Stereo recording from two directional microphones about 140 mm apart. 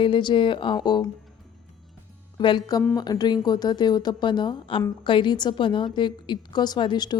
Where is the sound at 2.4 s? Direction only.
35° left (ahead or behind).